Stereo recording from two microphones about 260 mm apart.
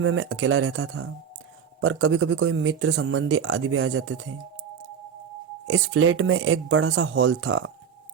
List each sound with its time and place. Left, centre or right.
0.0 s speech: right
5.6 s speech: right